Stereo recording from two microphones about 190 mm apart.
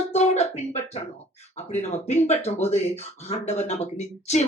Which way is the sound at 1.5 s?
35° left (ahead or behind).